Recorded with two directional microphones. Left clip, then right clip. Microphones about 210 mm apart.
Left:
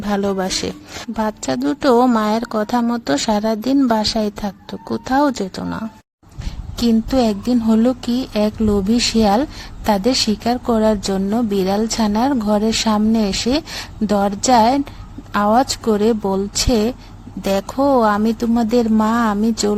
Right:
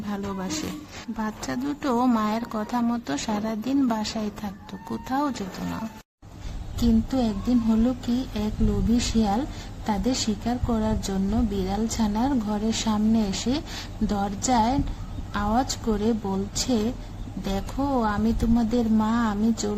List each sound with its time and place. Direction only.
0.0 s speech: 40° left (ahead or behind)
6.8 s speech: 40° left (ahead or behind)